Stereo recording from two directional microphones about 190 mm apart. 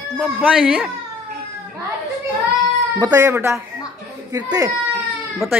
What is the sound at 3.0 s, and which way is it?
Speech, 15° right (ahead or behind).